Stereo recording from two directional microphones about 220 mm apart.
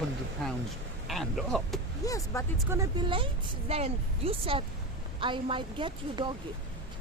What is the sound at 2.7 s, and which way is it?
A woman's voice, 15° right (ahead or behind).